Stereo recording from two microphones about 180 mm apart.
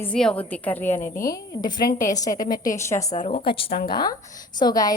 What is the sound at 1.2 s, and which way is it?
A woman's voice, 20° left (ahead or behind).